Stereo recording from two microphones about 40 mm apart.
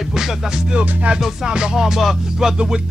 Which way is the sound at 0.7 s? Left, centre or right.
Right.